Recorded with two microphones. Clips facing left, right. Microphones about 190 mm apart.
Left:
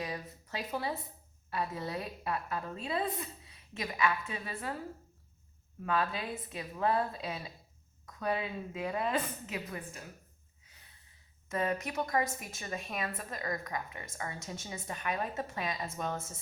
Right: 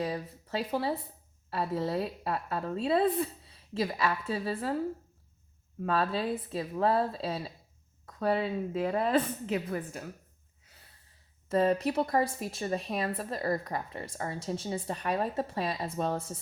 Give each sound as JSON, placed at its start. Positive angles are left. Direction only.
{"t": 0.0, "sound": "a woman's voice", "side_deg": -35}
{"t": 5.8, "sound": "a woman's voice", "side_deg": -30}
{"t": 11.4, "sound": "a woman's voice", "side_deg": -30}